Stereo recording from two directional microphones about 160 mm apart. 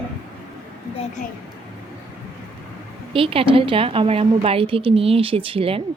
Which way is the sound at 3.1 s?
35° right (ahead or behind).